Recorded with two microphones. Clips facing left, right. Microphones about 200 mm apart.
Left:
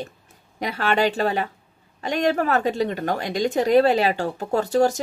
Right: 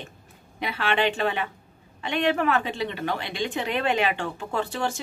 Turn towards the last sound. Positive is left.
turn(degrees=40)  # may be behind; listen again after turning